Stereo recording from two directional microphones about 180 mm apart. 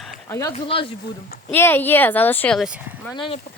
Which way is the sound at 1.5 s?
10° left (ahead or behind).